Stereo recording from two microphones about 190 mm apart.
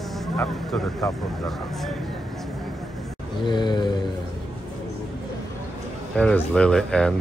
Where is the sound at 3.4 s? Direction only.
25° left (ahead or behind).